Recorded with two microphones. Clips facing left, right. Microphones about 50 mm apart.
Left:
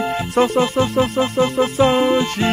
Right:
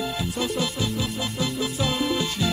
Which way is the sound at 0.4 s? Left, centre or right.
Left.